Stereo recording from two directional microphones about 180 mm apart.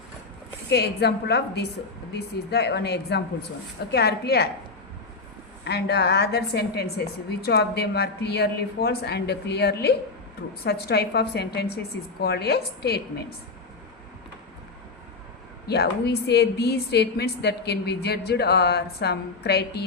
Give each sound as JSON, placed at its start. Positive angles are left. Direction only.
{"t": 0.7, "sound": "a woman's voice", "side_deg": 65}
{"t": 5.6, "sound": "a woman's voice", "side_deg": 65}
{"t": 15.6, "sound": "a woman's voice", "side_deg": 65}